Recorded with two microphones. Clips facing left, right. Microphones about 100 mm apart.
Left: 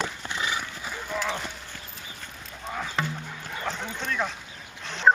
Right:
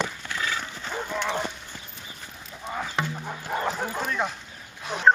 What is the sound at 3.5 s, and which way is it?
Bow-wow, 45° right (ahead or behind).